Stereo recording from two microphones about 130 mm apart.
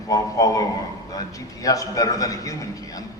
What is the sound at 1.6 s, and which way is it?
A man's voice, 25° left (ahead or behind).